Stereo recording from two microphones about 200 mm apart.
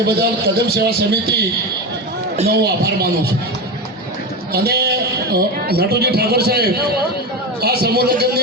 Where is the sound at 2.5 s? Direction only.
50° right (ahead or behind).